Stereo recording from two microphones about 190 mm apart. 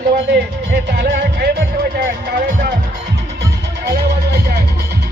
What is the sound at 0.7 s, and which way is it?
Music, 55° right (ahead or behind).